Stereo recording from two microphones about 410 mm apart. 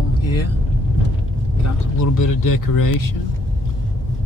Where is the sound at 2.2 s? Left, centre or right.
Left.